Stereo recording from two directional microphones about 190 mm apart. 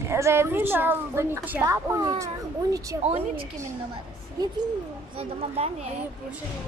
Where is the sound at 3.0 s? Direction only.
30° right (ahead or behind).